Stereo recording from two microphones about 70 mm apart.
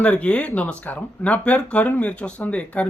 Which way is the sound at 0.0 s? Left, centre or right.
Centre.